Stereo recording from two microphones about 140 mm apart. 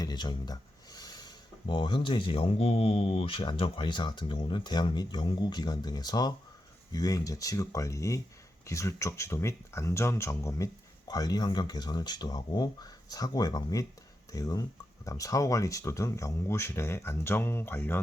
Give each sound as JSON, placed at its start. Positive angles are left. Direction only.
{"t": 0.0, "sound": "speech", "side_deg": 30}